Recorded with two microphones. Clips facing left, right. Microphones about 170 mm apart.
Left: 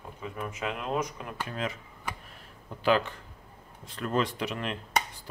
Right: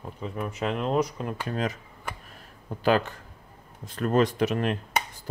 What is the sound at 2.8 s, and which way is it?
Speech, 45° right (ahead or behind).